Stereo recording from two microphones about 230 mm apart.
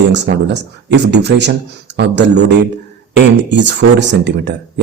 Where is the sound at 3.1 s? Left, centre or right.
Right.